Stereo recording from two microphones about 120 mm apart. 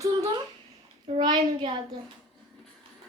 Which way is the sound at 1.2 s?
35° right (ahead or behind).